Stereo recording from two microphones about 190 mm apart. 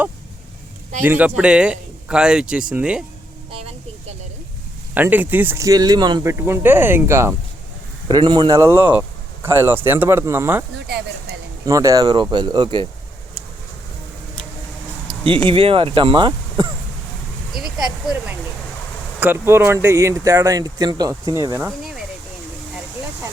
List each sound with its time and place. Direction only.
1.0 s speech: 10° right (ahead or behind)
3.5 s a sound: 30° right (ahead or behind)
4.9 s speech: 10° right (ahead or behind)
8.0 s speech: 25° right (ahead or behind)
10.8 s speech: 60° right (ahead or behind)
11.6 s speech: 15° right (ahead or behind)
15.0 s speech: 25° right (ahead or behind)
17.5 s vehicle: centre (ahead or behind)
19.2 s speech: 10° right (ahead or behind)
21.8 s a sound: centre (ahead or behind)